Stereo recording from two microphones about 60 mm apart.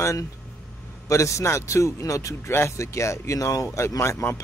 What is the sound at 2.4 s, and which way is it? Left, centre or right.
Speech, left.